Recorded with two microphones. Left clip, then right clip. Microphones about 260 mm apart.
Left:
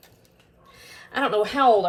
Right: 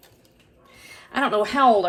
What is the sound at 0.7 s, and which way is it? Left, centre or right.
Speech, right.